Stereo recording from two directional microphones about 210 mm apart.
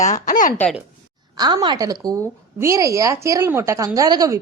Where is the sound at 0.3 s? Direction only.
40° left (ahead or behind).